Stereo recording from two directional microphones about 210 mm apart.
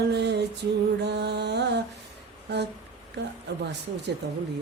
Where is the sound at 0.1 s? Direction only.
55° right (ahead or behind).